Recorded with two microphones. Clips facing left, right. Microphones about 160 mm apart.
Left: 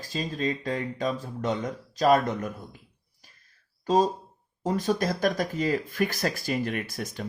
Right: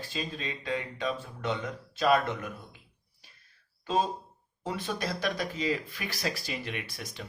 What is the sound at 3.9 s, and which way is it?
Speech, 40° left (ahead or behind).